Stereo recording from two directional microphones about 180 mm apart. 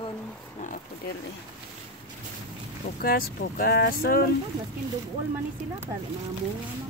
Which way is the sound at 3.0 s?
55° left (ahead or behind).